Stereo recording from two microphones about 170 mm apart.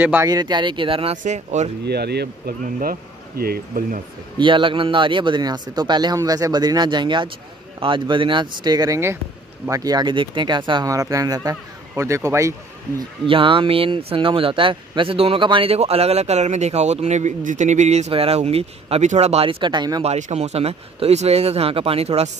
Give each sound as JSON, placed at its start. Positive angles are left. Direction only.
{"t": 0.0, "sound": "speech", "side_deg": -10}
{"t": 0.3, "sound": "speech", "side_deg": -25}
{"t": 1.1, "sound": "speech", "side_deg": -45}
{"t": 1.9, "sound": "speech", "side_deg": -75}
{"t": 2.6, "sound": "speech", "side_deg": -55}
{"t": 4.4, "sound": "speech", "side_deg": -30}
{"t": 13.3, "sound": "speech", "side_deg": -30}
{"t": 20.1, "sound": "speech", "side_deg": -40}